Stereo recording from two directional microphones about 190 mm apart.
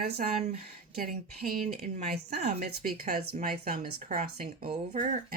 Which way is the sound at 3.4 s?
50° right (ahead or behind).